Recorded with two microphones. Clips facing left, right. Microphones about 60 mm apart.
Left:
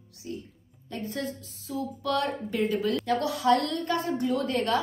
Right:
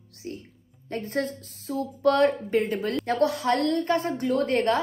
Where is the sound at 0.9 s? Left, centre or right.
Right.